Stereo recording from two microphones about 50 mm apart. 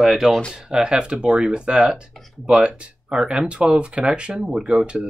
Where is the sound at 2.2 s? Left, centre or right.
Centre.